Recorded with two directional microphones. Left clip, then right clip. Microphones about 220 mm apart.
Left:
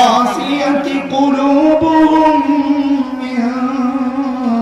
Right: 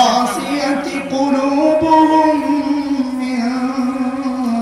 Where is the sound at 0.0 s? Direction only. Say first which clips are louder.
Left 3 dB; 45° left (ahead or behind).